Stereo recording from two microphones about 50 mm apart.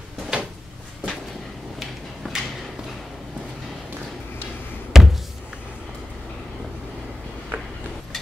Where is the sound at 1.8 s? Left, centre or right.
Centre.